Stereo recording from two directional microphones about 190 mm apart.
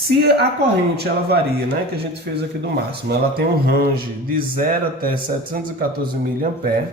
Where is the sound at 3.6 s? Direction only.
55° right (ahead or behind).